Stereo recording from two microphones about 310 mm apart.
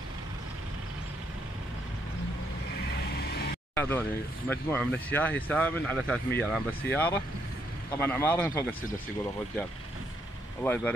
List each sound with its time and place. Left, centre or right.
3.2 s vehicle: left
3.7 s speech: centre
10.6 s speech: centre